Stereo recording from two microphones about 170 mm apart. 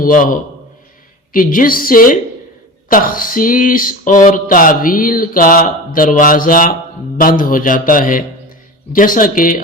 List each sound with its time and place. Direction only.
0.0 s a man's voice: 55° left (ahead or behind)